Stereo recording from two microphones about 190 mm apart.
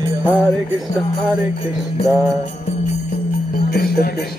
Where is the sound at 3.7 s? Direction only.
55° left (ahead or behind).